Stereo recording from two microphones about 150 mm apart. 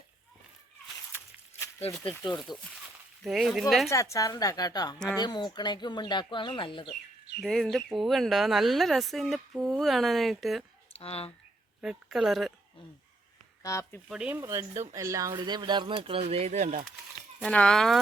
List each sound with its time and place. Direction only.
1.1 s a sound: 20° left (ahead or behind)
1.9 s speech: 5° left (ahead or behind)
3.8 s speech: 20° left (ahead or behind)
7.4 s speech: centre (ahead or behind)
10.9 s speech: 40° left (ahead or behind)
11.8 s speech: 5° right (ahead or behind)
13.6 s speech: 20° left (ahead or behind)
14.1 s speech: 10° right (ahead or behind); by 16.8 s 50° right (ahead or behind)
17.4 s speech: 5° left (ahead or behind)